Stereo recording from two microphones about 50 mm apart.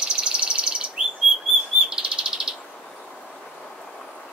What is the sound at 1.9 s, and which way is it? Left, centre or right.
Bird, centre.